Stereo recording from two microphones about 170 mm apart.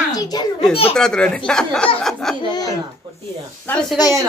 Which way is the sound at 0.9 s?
5° left (ahead or behind).